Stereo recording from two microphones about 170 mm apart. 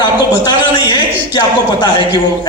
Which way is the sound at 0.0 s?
25° left (ahead or behind).